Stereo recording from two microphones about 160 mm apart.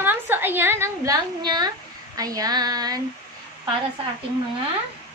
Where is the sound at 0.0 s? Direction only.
10° right (ahead or behind).